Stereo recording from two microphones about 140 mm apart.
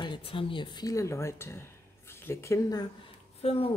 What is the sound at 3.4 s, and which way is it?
Speech, 45° left (ahead or behind).